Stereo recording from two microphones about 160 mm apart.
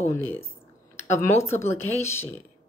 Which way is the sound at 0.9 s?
15° left (ahead or behind).